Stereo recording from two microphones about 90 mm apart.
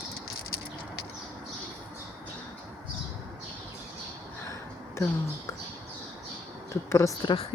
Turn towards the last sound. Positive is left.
turn(degrees=35)  # may be behind; listen again after turning